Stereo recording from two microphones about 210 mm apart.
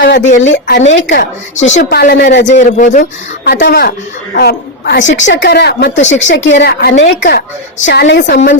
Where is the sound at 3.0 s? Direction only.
50° left (ahead or behind).